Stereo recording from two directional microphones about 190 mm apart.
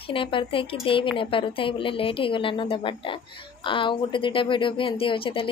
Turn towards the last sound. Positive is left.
turn(degrees=30)  # may be behind; listen again after turning